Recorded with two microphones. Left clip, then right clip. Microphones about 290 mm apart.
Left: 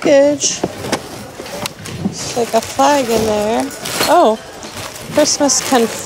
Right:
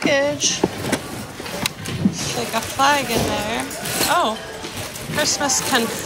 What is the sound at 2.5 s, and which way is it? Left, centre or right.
Speech, left.